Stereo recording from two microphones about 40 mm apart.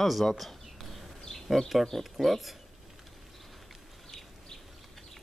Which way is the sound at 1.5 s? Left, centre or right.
Centre.